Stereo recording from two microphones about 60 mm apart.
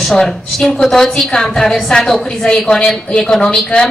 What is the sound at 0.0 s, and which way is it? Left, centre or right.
A woman's voice, centre.